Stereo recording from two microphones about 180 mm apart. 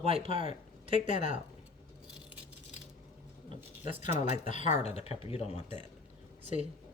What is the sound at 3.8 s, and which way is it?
Speech, 40° left (ahead or behind).